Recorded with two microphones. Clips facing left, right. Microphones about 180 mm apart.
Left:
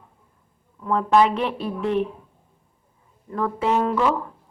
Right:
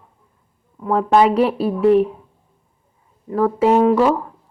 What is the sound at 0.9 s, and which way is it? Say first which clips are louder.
A woman's voice: right 4 dB; 40° right (ahead or behind).